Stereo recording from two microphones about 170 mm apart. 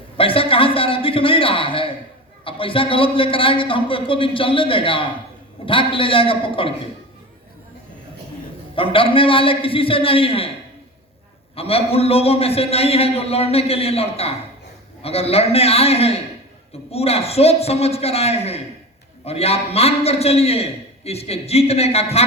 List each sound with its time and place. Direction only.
0.2 s a sound: 30° left (ahead or behind)
2.4 s a man's voice: 30° left (ahead or behind)
8.7 s a man's voice: 30° left (ahead or behind)
11.5 s a man's voice: 35° left (ahead or behind)